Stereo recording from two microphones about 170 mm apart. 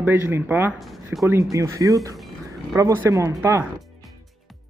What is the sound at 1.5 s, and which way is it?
Speech, 20° right (ahead or behind).